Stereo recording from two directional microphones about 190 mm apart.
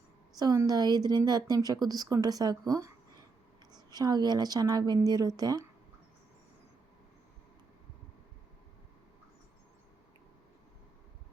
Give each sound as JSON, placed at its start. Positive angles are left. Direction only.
{"t": 0.3, "sound": "speech", "side_deg": -20}